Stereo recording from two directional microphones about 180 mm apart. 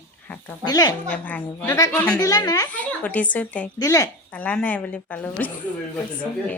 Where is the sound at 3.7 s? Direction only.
20° left (ahead or behind).